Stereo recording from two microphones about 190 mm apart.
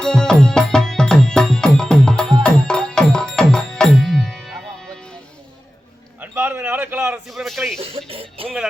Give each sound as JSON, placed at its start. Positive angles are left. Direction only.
{"t": 0.0, "sound": "music", "side_deg": 5}
{"t": 6.1, "sound": "a sound", "side_deg": -10}
{"t": 7.8, "sound": "music", "side_deg": -30}